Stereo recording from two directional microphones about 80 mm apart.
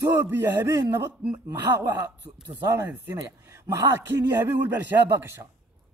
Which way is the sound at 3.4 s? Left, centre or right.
Right.